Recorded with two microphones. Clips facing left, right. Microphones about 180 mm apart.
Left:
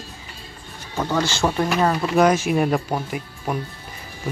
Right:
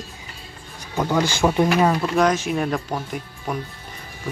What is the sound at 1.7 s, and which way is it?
Speech, centre (ahead or behind).